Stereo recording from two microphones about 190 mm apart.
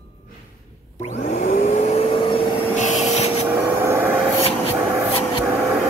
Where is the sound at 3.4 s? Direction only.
10° right (ahead or behind).